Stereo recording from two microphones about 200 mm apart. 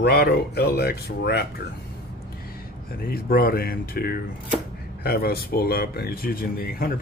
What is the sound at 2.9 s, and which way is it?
Speech, 50° left (ahead or behind).